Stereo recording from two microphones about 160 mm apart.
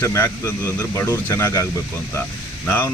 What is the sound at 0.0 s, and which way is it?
Speech, 15° left (ahead or behind).